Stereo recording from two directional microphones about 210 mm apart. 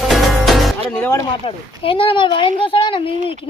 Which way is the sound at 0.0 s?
Centre (ahead or behind).